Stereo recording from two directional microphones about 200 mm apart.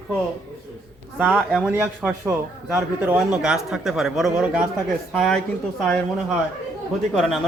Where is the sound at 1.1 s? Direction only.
5° left (ahead or behind).